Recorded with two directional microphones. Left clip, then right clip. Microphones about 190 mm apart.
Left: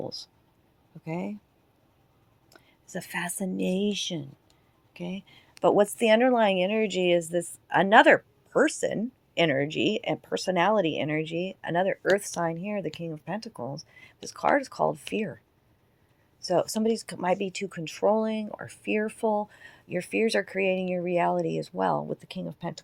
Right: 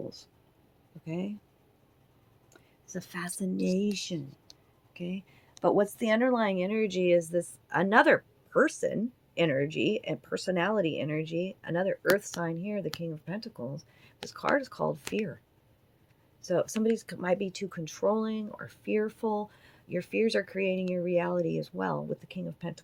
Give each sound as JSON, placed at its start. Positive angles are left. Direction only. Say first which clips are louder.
{"t": 1.0, "sound": "speech", "louder": "left 3 dB", "side_deg": 25}
{"t": 2.9, "sound": "speech", "louder": "left 6 dB", "side_deg": 25}
{"t": 4.9, "sound": "speech", "louder": "left 2 dB", "side_deg": 25}
{"t": 17.1, "sound": "speech", "louder": "left 3 dB", "side_deg": 30}